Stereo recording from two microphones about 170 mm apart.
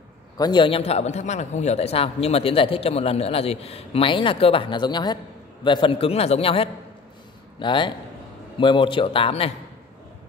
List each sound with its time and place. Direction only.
0.4 s a man's voice: 25° left (ahead or behind)